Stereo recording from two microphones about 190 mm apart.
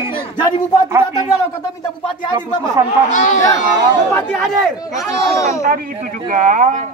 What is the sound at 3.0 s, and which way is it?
Speech, 40° left (ahead or behind).